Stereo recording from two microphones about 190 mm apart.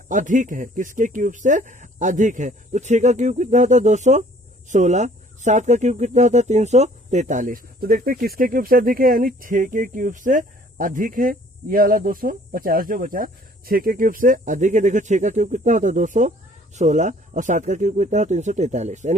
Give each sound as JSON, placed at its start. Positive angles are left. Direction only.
{"t": 0.1, "sound": "speech", "side_deg": -40}